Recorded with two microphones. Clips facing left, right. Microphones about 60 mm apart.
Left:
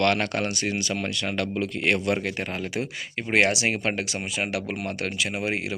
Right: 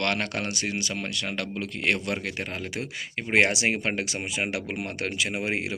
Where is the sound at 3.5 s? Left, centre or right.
Right.